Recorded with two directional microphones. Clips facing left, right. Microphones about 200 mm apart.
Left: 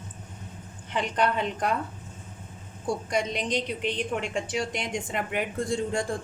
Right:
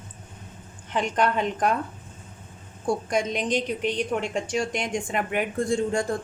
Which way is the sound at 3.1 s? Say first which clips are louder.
Right 1 dB; 50° right (ahead or behind).